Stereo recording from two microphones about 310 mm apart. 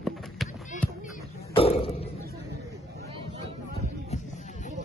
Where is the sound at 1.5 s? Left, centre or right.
Centre.